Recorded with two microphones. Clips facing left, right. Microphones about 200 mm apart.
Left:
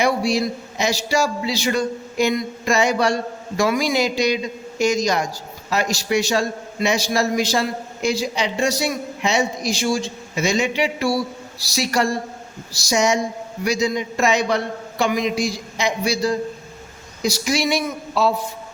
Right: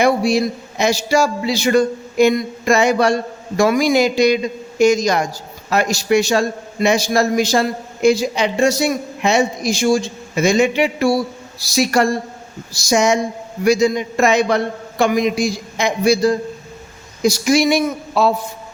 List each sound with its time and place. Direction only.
0.0 s a man's voice: 50° right (ahead or behind)